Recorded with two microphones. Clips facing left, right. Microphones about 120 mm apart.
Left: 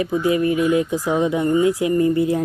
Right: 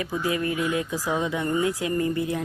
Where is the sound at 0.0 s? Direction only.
25° left (ahead or behind).